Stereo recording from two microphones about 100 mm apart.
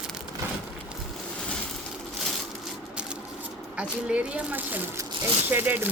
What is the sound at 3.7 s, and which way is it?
Speech, 10° right (ahead or behind).